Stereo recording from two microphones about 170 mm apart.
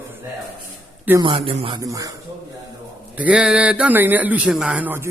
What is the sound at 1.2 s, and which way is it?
Speech, 30° right (ahead or behind).